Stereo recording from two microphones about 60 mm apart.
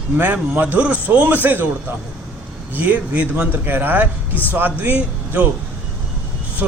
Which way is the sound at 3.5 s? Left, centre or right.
Right.